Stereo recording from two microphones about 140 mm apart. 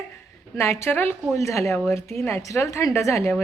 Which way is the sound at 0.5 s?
20° left (ahead or behind).